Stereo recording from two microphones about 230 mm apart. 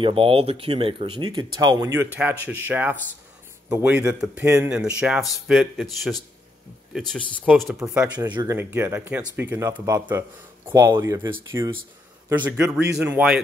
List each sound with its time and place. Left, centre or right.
0.0 s speech: right; by 13.4 s centre